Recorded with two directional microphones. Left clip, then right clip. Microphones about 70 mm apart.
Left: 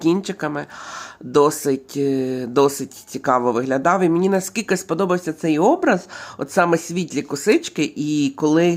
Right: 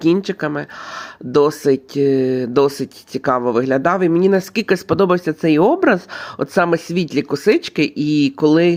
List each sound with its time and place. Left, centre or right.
0.0 s speech: centre
4.6 s speech: right; by 8.7 s centre